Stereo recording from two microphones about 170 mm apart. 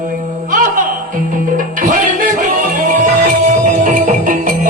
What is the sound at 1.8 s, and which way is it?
Music, 50° right (ahead or behind).